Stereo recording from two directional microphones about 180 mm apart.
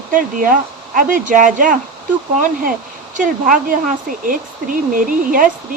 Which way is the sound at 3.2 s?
50° right (ahead or behind).